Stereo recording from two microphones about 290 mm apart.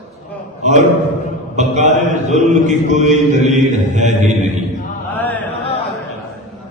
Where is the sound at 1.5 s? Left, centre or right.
Right.